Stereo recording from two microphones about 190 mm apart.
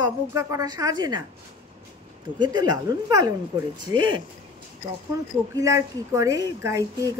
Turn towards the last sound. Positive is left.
turn(degrees=-20)  # may be behind; listen again after turning